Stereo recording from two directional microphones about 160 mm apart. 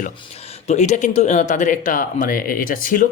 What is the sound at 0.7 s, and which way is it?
Speech, 45° left (ahead or behind).